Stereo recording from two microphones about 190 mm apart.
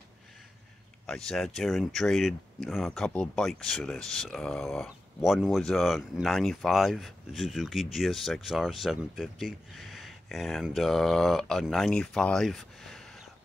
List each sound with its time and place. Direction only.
1.0 s speech: 5° left (ahead or behind)